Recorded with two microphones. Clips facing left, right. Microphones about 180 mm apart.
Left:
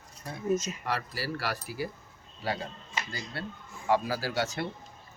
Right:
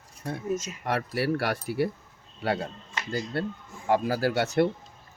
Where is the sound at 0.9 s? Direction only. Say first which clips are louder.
Right 9 dB; 60° right (ahead or behind).